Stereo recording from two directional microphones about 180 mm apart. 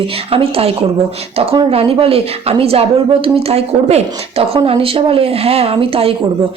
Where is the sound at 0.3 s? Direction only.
30° right (ahead or behind).